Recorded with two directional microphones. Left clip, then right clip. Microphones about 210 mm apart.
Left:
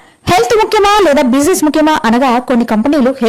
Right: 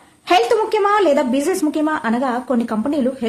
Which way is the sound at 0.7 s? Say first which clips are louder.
Left 7 dB; 40° left (ahead or behind).